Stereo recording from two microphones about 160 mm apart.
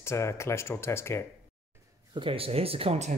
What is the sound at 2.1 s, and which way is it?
Speech, 35° right (ahead or behind).